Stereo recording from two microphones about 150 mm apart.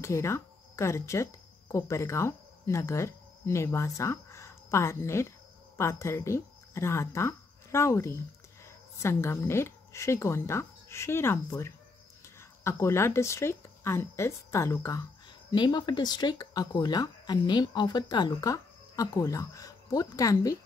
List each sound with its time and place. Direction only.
0.0 s speech: 20° left (ahead or behind)
15.5 s speech: 30° left (ahead or behind)